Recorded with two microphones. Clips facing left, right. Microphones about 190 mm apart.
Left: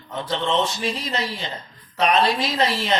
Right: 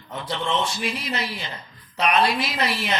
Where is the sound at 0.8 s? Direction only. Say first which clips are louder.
Left 2 dB; 35° left (ahead or behind).